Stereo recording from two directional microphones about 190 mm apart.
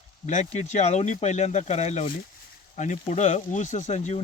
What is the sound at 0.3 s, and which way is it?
Speech, 40° left (ahead or behind).